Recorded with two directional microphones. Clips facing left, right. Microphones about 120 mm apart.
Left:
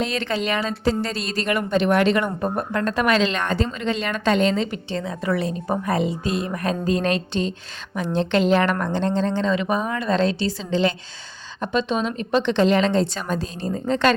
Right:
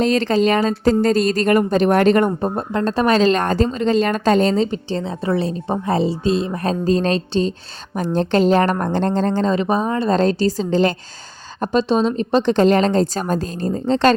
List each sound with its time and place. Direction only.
0.0 s a woman's voice: 40° right (ahead or behind)
2.4 s a woman's voice: 30° right (ahead or behind); by 13.8 s 45° right (ahead or behind)
13.8 s a woman's voice: 30° right (ahead or behind)